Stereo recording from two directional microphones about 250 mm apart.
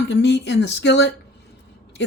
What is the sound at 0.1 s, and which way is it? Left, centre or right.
Speech, left.